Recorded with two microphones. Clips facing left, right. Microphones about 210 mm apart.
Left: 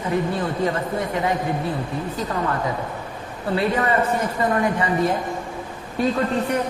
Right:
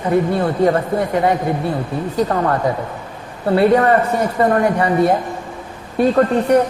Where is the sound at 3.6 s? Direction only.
55° right (ahead or behind).